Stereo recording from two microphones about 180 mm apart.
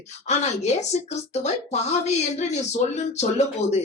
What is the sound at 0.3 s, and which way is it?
Speech, 40° left (ahead or behind).